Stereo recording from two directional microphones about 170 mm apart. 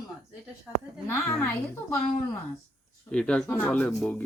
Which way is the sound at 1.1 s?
15° left (ahead or behind).